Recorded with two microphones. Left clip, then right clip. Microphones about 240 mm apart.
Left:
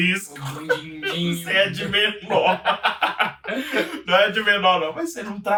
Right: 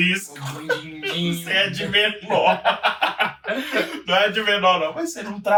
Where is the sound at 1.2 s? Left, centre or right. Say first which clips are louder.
Even; centre.